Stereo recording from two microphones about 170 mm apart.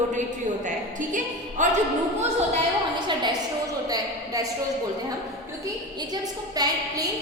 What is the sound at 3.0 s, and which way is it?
A woman's voice, 25° right (ahead or behind).